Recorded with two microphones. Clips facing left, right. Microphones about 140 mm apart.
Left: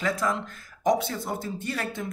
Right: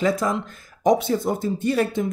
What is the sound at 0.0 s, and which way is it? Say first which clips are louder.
Speech: right 5 dB; 20° right (ahead or behind).